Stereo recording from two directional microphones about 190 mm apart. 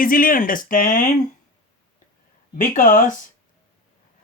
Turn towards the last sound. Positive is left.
turn(degrees=45)  # may be behind; listen again after turning